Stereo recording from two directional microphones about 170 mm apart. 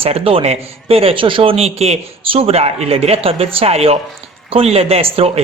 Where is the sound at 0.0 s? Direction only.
35° right (ahead or behind).